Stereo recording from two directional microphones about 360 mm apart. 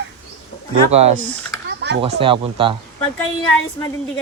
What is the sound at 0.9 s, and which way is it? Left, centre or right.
Speech, centre.